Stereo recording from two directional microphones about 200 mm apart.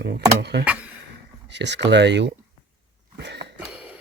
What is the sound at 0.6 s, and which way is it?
Speech, 5° right (ahead or behind).